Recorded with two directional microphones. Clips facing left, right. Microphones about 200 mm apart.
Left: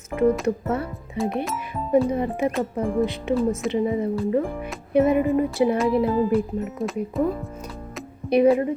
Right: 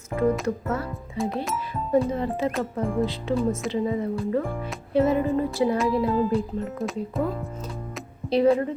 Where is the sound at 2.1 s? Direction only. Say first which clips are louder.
Left 2 dB; 15° left (ahead or behind).